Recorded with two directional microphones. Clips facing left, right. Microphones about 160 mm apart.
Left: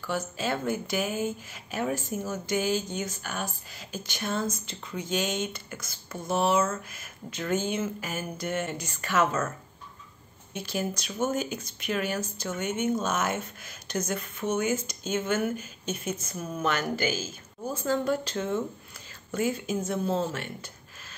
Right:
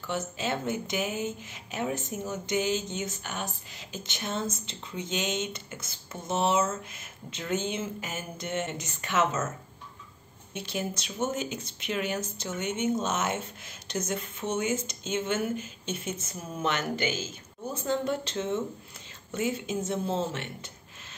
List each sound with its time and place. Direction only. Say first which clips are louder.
0.0 s speech: left 1 dB; 20° right (ahead or behind)
10.5 s speech: left 2 dB; 25° right (ahead or behind)